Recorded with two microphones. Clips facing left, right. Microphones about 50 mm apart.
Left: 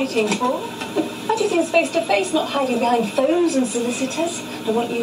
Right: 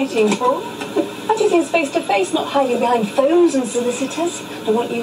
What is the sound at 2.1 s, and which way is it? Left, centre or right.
Speech, centre.